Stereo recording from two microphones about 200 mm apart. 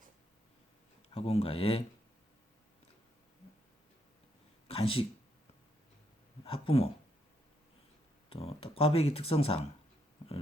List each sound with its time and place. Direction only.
1.1 s speech: 30° left (ahead or behind)
4.7 s speech: 25° left (ahead or behind)
6.4 s speech: 30° left (ahead or behind)
8.3 s speech: 30° left (ahead or behind)